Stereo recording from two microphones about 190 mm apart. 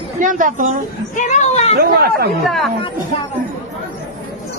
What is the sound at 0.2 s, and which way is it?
Speech, 45° right (ahead or behind).